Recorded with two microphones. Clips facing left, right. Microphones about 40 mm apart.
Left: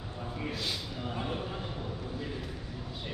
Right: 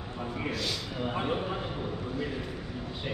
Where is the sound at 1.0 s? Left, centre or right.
Right.